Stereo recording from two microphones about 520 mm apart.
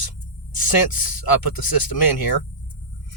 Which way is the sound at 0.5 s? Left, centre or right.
Left.